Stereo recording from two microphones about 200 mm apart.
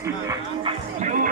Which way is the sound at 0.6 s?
40° right (ahead or behind).